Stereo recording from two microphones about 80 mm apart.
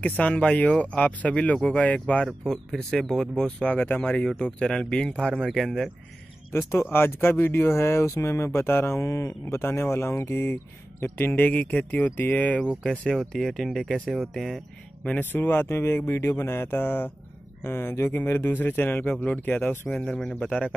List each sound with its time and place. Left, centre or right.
0.0 s speech: centre
2.2 s speech: centre
3.4 s speech: centre
4.6 s speech: centre
5.5 s speech: centre
6.5 s speech: left; by 14.6 s centre
15.0 s speech: left
20.0 s speech: centre